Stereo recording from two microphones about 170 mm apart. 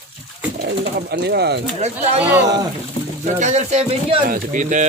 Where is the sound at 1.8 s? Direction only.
40° right (ahead or behind).